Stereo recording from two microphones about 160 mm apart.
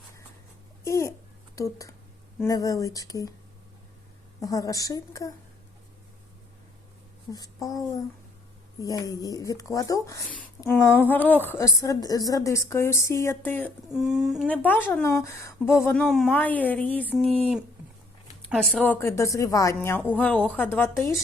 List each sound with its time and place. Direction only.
0.9 s a woman's voice: 20° left (ahead or behind)
4.4 s speech: 20° left (ahead or behind)
7.3 s a woman's voice: 20° left (ahead or behind)
13.9 s a woman's voice: centre (ahead or behind); by 16.0 s 15° left (ahead or behind)
16.0 s speech: centre (ahead or behind)
16.3 s a woman's voice: 10° left (ahead or behind)
18.5 s a woman's voice: centre (ahead or behind)